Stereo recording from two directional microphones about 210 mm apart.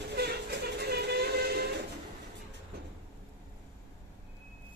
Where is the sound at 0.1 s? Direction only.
50° right (ahead or behind).